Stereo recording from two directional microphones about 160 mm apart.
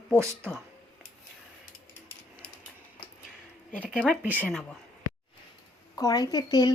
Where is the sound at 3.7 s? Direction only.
5° left (ahead or behind).